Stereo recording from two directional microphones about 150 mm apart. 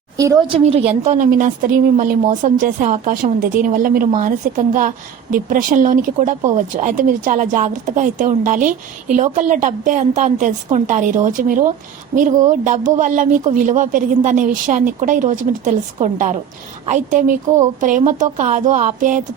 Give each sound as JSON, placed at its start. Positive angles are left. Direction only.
{"t": 0.4, "sound": "a woman's voice", "side_deg": -40}
{"t": 1.2, "sound": "speech", "side_deg": -60}